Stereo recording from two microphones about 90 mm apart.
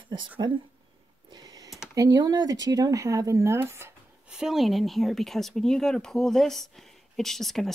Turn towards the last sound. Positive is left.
turn(degrees=5)  # may be behind; listen again after turning